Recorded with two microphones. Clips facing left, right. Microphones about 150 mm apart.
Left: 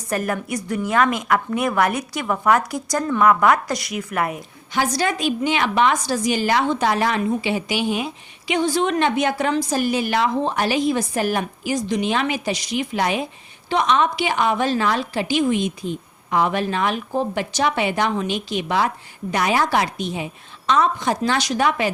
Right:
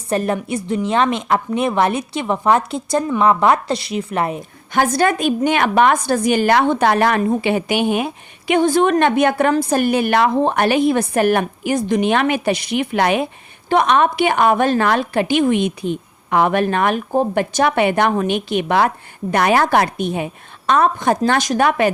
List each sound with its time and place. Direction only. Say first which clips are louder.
0.1 s a woman's voice: right 4 dB; 30° right (ahead or behind)
4.7 s a woman's voice: right 5 dB; 50° right (ahead or behind)